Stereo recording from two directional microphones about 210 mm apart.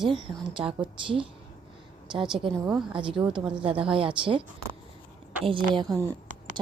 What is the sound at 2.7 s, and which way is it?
Speech, centre (ahead or behind).